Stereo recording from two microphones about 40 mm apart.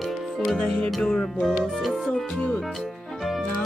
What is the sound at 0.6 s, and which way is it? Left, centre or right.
Music, centre.